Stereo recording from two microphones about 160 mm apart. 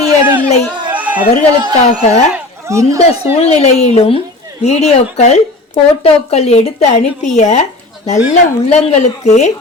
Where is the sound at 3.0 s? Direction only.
40° left (ahead or behind).